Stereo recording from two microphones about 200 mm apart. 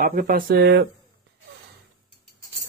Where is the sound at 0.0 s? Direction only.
45° right (ahead or behind).